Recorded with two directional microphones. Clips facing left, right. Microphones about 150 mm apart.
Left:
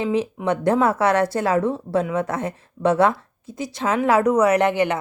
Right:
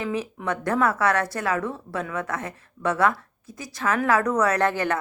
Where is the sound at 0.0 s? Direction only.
25° left (ahead or behind).